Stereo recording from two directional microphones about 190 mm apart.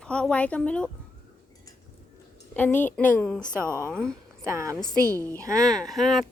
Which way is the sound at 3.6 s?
15° right (ahead or behind).